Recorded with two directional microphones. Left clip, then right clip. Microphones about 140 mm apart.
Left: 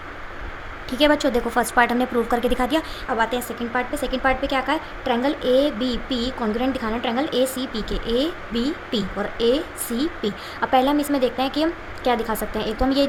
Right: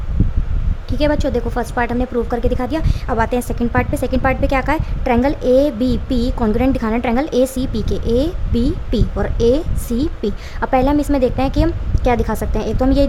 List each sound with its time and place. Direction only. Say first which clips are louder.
0.9 s a woman's voice: even; 35° right (ahead or behind)